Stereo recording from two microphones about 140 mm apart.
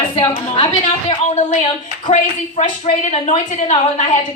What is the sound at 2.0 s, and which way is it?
A woman's voice, 60° left (ahead or behind).